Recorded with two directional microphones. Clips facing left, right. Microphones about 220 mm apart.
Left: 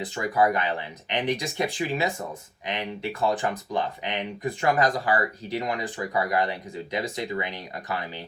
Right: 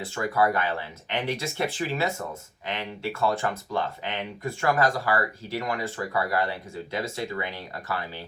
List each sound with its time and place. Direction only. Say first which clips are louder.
0.0 s speech: left 1 dB; 15° left (ahead or behind)